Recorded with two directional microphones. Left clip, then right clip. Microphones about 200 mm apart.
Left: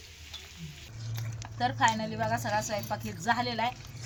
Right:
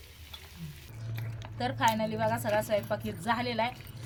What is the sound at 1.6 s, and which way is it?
A woman's voice, 5° right (ahead or behind).